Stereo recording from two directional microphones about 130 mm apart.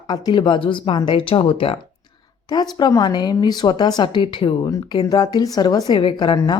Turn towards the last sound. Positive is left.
turn(degrees=35)  # may be behind; listen again after turning